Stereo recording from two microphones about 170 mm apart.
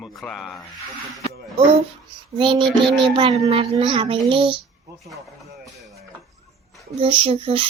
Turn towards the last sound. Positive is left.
turn(degrees=-30)  # may be behind; listen again after turning